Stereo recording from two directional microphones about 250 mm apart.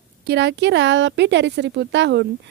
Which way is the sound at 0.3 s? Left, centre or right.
Right.